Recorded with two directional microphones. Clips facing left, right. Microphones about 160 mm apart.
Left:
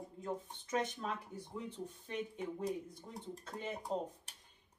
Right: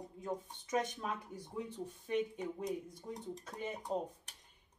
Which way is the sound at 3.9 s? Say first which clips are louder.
Right 1 dB; 5° right (ahead or behind).